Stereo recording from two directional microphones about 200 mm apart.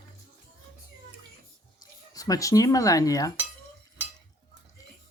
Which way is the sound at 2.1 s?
20° left (ahead or behind).